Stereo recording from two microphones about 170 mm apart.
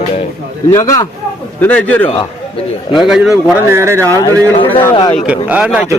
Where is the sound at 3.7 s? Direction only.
15° right (ahead or behind).